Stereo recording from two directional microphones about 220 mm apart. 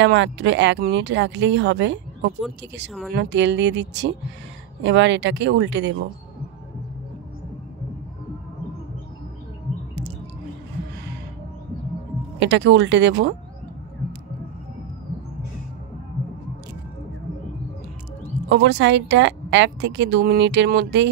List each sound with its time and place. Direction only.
0.0 s speech: 55° right (ahead or behind)
12.4 s speech: 55° right (ahead or behind)
18.5 s speech: 55° right (ahead or behind)